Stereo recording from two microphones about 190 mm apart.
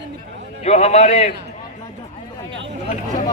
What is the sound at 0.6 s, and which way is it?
Speech, 35° left (ahead or behind).